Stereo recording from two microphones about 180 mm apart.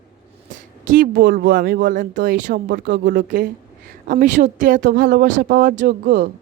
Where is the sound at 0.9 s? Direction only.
50° right (ahead or behind).